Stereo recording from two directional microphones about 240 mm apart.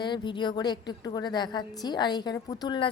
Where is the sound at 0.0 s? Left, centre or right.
Centre.